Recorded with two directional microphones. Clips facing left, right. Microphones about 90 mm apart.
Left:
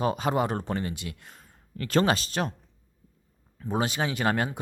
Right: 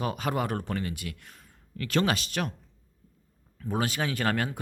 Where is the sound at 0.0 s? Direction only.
25° left (ahead or behind).